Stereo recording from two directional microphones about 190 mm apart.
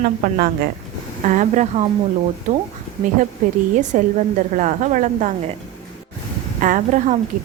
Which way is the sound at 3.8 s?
45° right (ahead or behind).